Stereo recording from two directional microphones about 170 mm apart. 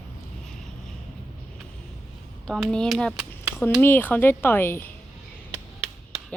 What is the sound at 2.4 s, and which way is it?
Speech, 5° left (ahead or behind).